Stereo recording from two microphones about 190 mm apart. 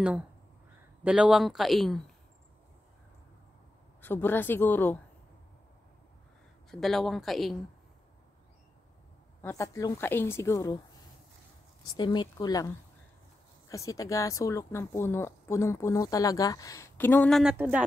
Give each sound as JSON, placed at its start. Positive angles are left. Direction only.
{"t": 1.0, "sound": "speech", "side_deg": -5}
{"t": 4.0, "sound": "speech", "side_deg": 10}
{"t": 6.7, "sound": "speech", "side_deg": 0}
{"t": 9.4, "sound": "speech", "side_deg": 15}
{"t": 11.8, "sound": "speech", "side_deg": 25}
{"t": 17.4, "sound": "speech", "side_deg": -5}